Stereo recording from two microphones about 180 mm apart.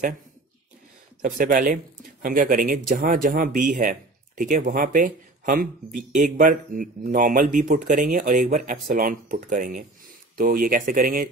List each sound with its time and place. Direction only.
1.2 s speech: 50° right (ahead or behind)